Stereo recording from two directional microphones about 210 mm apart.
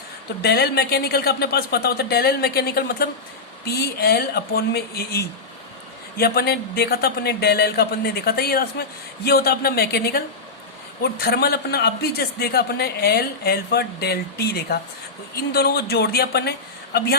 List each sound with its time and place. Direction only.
0.4 s a man's voice: 50° left (ahead or behind)